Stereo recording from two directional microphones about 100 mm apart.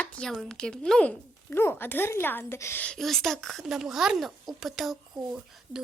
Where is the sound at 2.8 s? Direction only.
5° left (ahead or behind).